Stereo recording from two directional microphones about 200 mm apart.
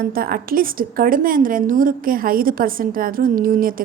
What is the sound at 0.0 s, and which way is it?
A woman's voice, 50° right (ahead or behind).